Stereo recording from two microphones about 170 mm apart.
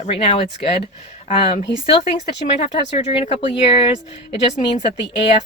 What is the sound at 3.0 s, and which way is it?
Speech, 30° left (ahead or behind).